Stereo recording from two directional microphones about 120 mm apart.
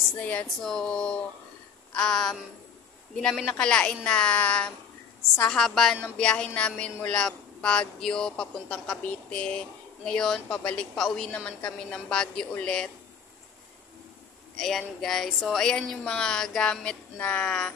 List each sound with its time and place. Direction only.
0.2 s a woman's voice: 10° left (ahead or behind)
14.6 s speech: 5° left (ahead or behind)